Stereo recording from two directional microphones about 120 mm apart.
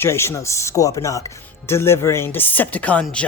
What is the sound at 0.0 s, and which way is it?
Speech, 20° left (ahead or behind).